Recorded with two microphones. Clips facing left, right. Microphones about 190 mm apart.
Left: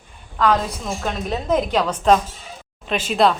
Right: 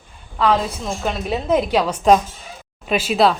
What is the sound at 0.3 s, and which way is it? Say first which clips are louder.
A woman's voice: right 1 dB; 10° right (ahead or behind).